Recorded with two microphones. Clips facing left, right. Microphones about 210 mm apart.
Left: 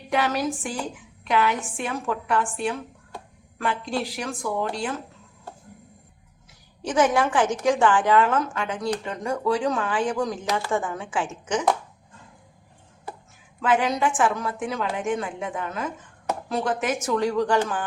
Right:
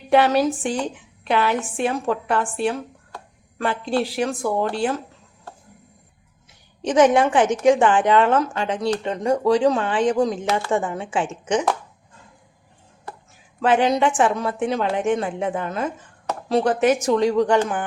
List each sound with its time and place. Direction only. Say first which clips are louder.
0.1 s speech: right 7 dB; 30° right (ahead or behind)
7.0 s speech: right 5 dB; 25° right (ahead or behind)
13.6 s speech: right 4 dB; 30° right (ahead or behind)
17.2 s speech: right 3 dB; 20° right (ahead or behind)